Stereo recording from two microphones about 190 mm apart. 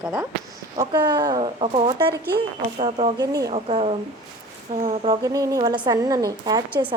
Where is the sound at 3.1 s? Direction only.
20° right (ahead or behind).